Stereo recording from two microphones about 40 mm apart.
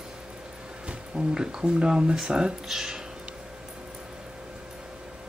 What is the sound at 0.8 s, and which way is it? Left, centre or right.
Speech, right.